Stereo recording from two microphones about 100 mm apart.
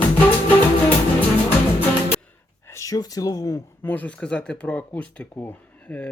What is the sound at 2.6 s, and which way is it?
Speech, 30° left (ahead or behind).